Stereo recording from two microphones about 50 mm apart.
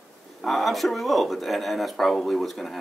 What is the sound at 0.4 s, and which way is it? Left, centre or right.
Speech, centre.